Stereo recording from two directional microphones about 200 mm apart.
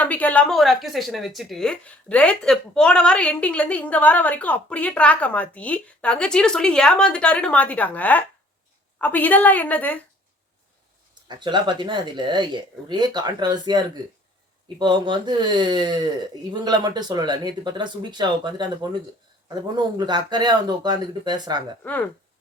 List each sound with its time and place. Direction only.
0.0 s a woman's voice: 5° left (ahead or behind)
11.3 s speech: 20° right (ahead or behind)
21.8 s a woman's voice: 5° left (ahead or behind)